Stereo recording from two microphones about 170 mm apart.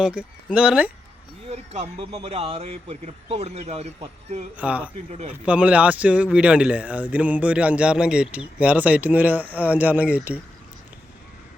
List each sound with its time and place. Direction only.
0.0 s speech: 5° right (ahead or behind)
1.5 s speech: 40° right (ahead or behind)
4.5 s speech: 10° right (ahead or behind)